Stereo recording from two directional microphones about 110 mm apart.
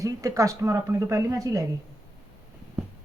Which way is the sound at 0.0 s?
30° right (ahead or behind).